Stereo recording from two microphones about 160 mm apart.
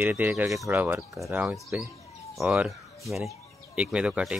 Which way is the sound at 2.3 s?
Centre (ahead or behind).